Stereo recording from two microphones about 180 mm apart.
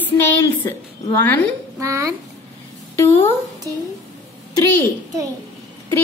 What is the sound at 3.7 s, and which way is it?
Speech, 20° right (ahead or behind).